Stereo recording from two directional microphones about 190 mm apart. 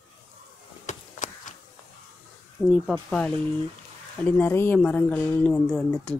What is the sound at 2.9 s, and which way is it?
A woman's voice, 5° left (ahead or behind).